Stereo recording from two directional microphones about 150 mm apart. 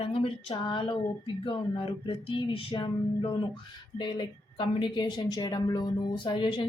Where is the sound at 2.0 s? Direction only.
35° left (ahead or behind).